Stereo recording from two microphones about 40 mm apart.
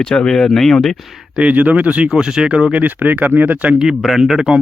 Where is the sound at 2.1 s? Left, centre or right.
Centre.